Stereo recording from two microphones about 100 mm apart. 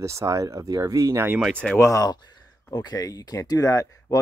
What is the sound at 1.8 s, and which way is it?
Speech, 35° left (ahead or behind).